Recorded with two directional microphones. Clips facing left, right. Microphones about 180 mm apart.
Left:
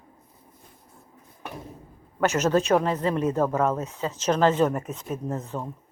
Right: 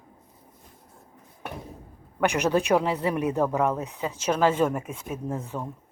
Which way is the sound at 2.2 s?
15° right (ahead or behind).